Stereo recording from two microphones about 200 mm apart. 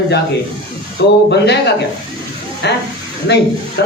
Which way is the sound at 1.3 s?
60° left (ahead or behind).